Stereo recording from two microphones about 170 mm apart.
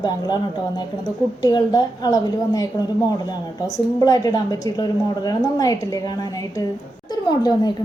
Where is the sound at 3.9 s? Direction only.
20° left (ahead or behind).